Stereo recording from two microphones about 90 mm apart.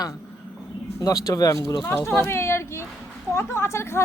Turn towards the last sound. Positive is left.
turn(degrees=30)  # may be behind; listen again after turning